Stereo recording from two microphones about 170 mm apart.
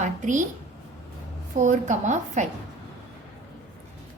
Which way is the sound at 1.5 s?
45° right (ahead or behind).